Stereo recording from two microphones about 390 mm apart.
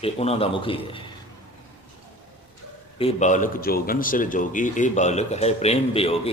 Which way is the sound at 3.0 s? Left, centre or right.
Centre.